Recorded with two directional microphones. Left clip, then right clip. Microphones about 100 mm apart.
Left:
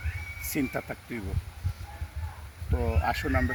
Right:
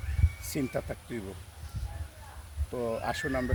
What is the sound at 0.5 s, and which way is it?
Speech, 25° right (ahead or behind).